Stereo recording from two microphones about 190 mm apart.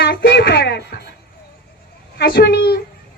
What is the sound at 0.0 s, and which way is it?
Music, 60° left (ahead or behind).